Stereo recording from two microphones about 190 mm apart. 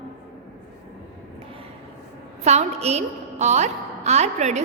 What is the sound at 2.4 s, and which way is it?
A woman's voice, 35° right (ahead or behind).